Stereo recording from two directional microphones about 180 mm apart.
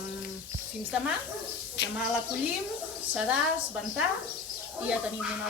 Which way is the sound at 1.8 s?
65° left (ahead or behind).